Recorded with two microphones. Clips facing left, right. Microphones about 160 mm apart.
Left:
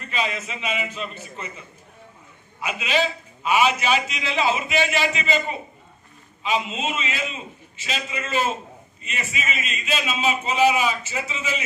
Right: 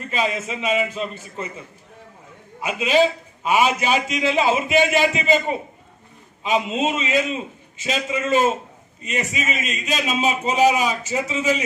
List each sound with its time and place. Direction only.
0.1 s a man's voice: 40° right (ahead or behind)
2.6 s a man's voice: 40° right (ahead or behind)
6.4 s a man's voice: 45° right (ahead or behind)